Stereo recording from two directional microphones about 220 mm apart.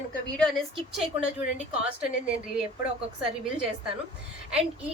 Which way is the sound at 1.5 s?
5° right (ahead or behind).